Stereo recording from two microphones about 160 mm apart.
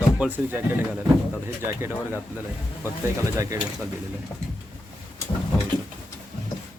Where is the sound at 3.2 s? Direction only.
20° right (ahead or behind).